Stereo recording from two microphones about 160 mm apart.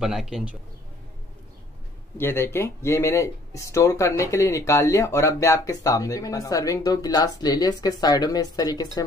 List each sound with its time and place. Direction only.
0.0 s a man's voice: centre (ahead or behind)
2.1 s speech: 15° left (ahead or behind)